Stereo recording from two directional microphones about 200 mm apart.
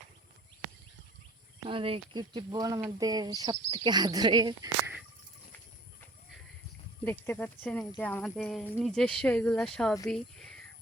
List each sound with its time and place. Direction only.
1.6 s speech: 25° right (ahead or behind)
7.0 s speech: 10° left (ahead or behind)